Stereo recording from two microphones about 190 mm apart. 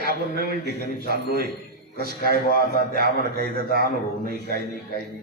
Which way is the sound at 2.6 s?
55° right (ahead or behind).